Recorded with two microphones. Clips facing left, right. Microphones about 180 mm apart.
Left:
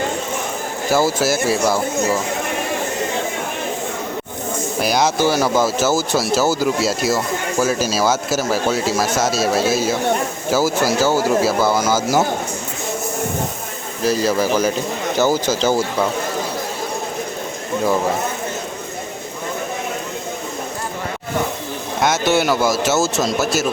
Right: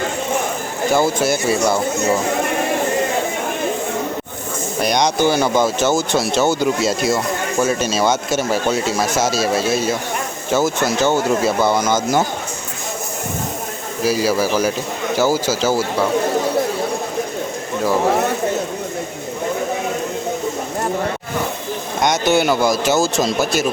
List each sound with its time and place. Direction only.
0.9 s speech: 5° left (ahead or behind)
4.8 s speech: 5° left (ahead or behind)
14.0 s speech: 10° right (ahead or behind)
22.0 s speech: centre (ahead or behind)